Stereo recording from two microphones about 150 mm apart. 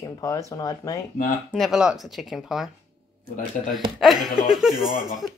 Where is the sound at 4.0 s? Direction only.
Centre (ahead or behind).